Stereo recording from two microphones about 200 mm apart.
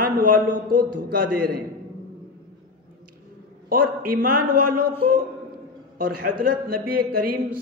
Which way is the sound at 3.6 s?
50° right (ahead or behind).